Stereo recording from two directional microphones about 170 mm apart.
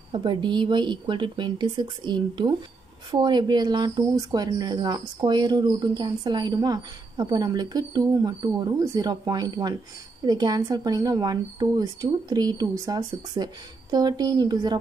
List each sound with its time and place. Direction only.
0.1 s speech: 25° right (ahead or behind)